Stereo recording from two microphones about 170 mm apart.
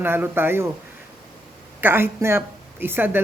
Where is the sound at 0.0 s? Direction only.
10° right (ahead or behind).